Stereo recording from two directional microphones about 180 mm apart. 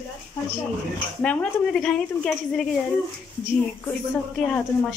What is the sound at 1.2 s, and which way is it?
Speech, 5° left (ahead or behind).